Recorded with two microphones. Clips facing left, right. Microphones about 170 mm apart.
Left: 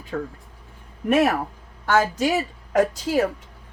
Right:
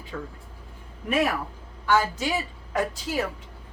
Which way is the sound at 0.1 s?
50° left (ahead or behind).